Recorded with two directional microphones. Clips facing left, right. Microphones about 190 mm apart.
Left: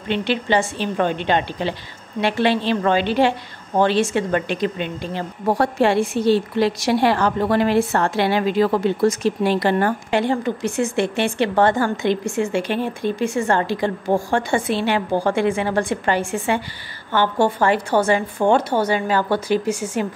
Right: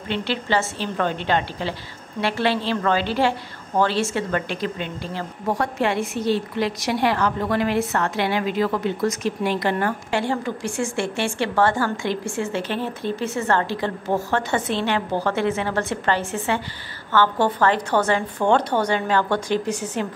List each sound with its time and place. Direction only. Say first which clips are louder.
0.1 s a woman's voice: left 4 dB; 20° left (ahead or behind)
5.5 s a woman's voice: left 5 dB; 35° left (ahead or behind)
10.1 s speech: left 4 dB; 20° left (ahead or behind)